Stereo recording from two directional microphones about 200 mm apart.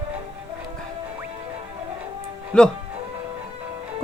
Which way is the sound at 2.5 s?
5° left (ahead or behind).